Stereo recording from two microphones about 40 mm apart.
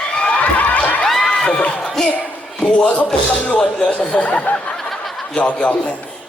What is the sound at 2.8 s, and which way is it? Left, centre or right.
Speech, left.